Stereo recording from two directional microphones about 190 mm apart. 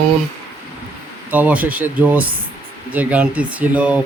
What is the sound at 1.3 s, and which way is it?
Speech, 10° right (ahead or behind).